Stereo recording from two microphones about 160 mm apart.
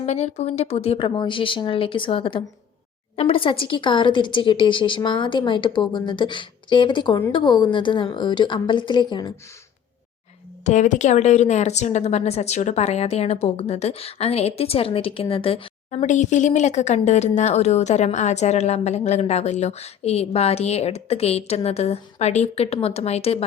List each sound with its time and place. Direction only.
0.0 s a woman's voice: 40° left (ahead or behind); by 9.3 s 25° left (ahead or behind)
10.6 s a woman's voice: 45° left (ahead or behind)